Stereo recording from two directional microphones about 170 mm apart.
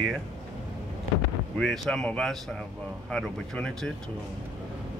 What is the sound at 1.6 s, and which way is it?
Speech, centre (ahead or behind).